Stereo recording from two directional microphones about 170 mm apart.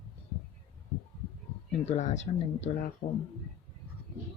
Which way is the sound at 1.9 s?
45° left (ahead or behind).